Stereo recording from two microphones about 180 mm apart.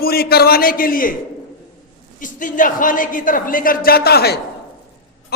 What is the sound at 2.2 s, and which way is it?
A man's voice, 45° left (ahead or behind).